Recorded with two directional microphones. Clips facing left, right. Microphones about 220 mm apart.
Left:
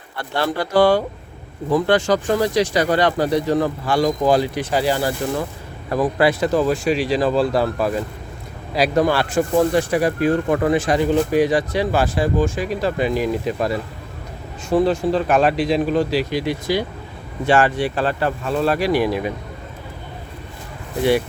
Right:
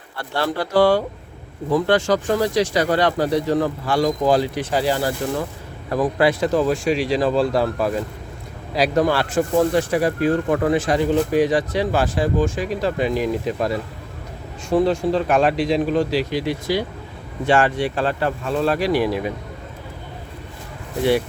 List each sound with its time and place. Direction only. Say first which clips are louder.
0.2 s speech: left 1 dB; 15° left (ahead or behind)
17.4 s speech: left 1 dB; 5° left (ahead or behind)
21.0 s speech: left 1 dB; 10° left (ahead or behind)